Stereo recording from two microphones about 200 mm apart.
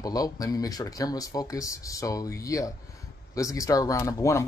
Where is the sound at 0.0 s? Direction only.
20° left (ahead or behind).